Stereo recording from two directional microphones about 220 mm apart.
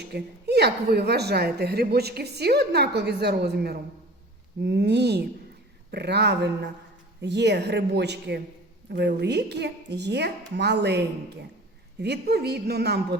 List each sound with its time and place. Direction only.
0.1 s a woman's voice: 45° right (ahead or behind)